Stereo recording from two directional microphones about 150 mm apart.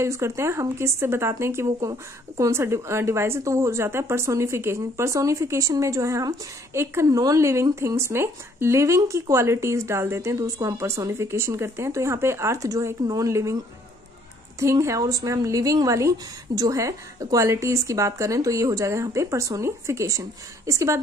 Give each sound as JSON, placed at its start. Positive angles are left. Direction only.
{"t": 0.0, "sound": "speech", "side_deg": -20}
{"t": 14.6, "sound": "speech", "side_deg": -20}